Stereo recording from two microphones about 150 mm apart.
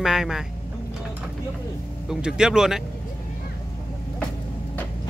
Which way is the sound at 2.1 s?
5° right (ahead or behind).